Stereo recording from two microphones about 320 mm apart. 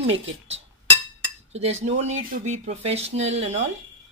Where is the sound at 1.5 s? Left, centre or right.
Centre.